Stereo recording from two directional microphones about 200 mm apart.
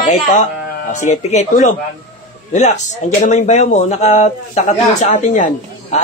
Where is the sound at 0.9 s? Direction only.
35° left (ahead or behind).